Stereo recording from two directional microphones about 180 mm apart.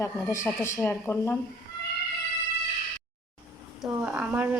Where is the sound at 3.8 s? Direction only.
5° right (ahead or behind).